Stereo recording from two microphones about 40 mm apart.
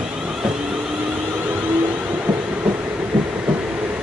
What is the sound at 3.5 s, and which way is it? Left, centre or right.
Vehicle, right.